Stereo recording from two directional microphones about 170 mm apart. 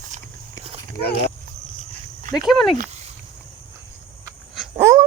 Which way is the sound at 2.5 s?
Centre (ahead or behind).